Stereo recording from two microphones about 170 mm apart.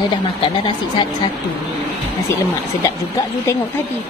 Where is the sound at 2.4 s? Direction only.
20° left (ahead or behind).